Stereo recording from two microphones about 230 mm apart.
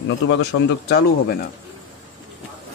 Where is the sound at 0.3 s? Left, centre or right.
Left.